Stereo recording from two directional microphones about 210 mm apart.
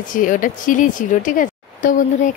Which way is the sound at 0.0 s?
40° left (ahead or behind).